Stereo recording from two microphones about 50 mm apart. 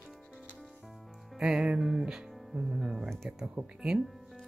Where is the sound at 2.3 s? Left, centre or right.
Centre.